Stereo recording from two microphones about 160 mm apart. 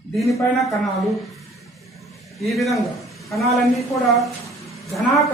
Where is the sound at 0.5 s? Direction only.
Centre (ahead or behind).